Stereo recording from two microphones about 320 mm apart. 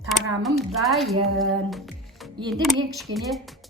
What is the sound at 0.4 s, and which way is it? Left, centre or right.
A woman's voice, centre.